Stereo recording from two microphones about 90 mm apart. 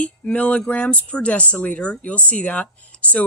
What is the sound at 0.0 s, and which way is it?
Speech, 15° left (ahead or behind).